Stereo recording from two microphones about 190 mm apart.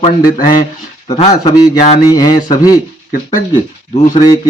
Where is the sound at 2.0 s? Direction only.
20° left (ahead or behind).